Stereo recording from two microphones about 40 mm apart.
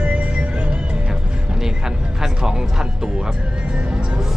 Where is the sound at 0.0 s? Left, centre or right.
Right.